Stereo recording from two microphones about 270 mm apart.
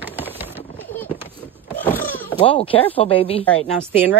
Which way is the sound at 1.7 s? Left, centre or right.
Centre.